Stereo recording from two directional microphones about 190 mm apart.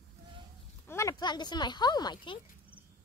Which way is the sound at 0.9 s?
15° left (ahead or behind).